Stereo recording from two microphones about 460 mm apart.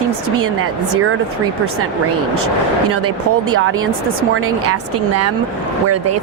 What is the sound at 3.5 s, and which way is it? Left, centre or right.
Speech, right.